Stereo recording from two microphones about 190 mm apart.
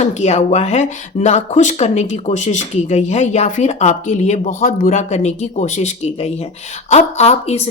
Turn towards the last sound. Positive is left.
turn(degrees=35)  # may be behind; listen again after turning